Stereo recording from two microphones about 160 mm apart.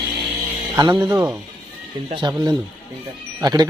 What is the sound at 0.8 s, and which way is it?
A man's voice, 25° right (ahead or behind).